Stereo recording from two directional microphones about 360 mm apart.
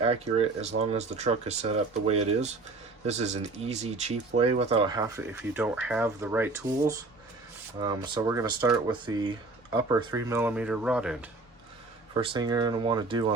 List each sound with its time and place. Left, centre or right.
0.0 s speech: centre
12.1 s speech: centre